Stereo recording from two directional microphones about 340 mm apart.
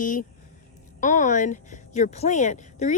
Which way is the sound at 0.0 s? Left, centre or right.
Left.